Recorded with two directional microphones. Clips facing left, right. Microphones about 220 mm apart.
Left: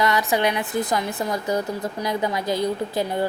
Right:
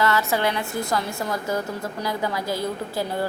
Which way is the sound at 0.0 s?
15° left (ahead or behind).